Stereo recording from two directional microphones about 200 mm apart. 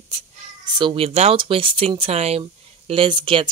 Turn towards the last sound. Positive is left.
turn(degrees=-25)  # may be behind; listen again after turning